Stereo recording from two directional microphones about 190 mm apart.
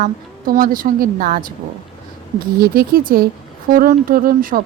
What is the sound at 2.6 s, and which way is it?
A woman's voice, 50° right (ahead or behind).